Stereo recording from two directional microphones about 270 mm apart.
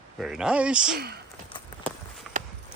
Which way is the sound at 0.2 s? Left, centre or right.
Centre.